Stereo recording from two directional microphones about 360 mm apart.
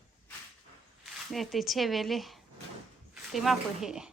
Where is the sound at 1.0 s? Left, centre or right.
Centre.